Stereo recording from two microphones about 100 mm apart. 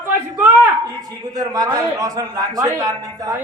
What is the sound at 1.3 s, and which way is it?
A man's voice, 40° right (ahead or behind).